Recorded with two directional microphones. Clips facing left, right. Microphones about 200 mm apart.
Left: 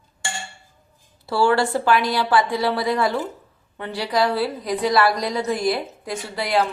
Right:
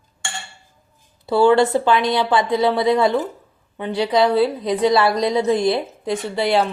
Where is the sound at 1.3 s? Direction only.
20° right (ahead or behind).